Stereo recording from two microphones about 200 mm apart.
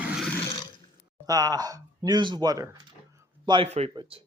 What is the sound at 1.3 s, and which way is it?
Speech, 20° right (ahead or behind).